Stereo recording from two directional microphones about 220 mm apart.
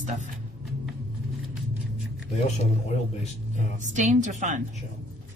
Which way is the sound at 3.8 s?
35° right (ahead or behind).